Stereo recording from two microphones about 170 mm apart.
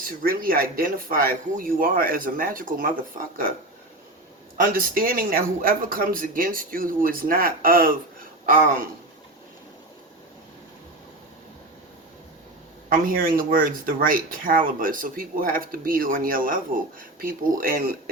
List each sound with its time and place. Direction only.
0.0 s speech: 55° right (ahead or behind)
4.6 s speech: 55° right (ahead or behind)
12.9 s speech: 55° right (ahead or behind)